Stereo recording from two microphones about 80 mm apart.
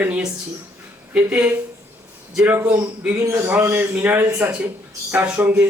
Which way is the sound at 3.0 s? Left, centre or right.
Centre.